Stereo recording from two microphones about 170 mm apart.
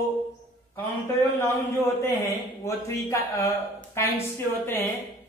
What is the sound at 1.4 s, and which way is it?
Speech, 15° left (ahead or behind).